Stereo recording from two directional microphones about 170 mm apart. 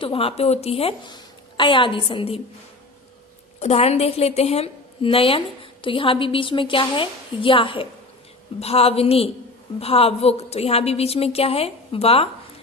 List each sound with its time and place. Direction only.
0.0 s a woman's voice: 35° left (ahead or behind)
3.6 s a woman's voice: 40° left (ahead or behind)